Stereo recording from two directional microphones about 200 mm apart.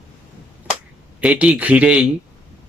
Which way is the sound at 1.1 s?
5° right (ahead or behind).